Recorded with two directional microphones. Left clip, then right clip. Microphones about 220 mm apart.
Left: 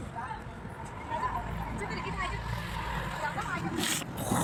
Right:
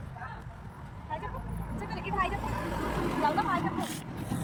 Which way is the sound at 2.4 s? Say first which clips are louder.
Right 3 dB; 45° right (ahead or behind).